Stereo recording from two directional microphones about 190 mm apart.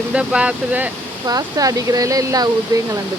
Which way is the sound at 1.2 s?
20° right (ahead or behind).